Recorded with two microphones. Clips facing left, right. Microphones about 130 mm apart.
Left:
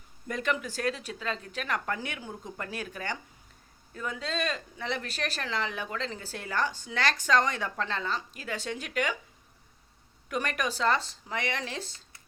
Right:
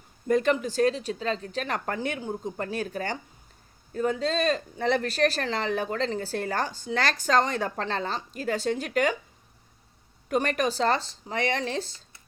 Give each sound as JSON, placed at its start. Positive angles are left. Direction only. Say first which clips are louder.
{"t": 0.3, "sound": "speech", "louder": "right 8 dB", "side_deg": -35}
{"t": 10.2, "sound": "speech", "louder": "right 6 dB", "side_deg": -35}